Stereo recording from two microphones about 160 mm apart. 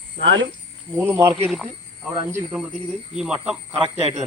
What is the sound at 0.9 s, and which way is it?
Speech, 15° right (ahead or behind).